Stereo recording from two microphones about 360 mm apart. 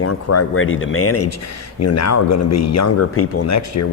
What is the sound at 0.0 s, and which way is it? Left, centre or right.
Speech, left.